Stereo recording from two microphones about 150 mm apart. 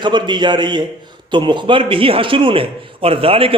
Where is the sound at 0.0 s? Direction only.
30° right (ahead or behind).